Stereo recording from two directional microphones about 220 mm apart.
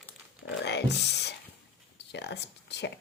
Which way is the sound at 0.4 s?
50° left (ahead or behind).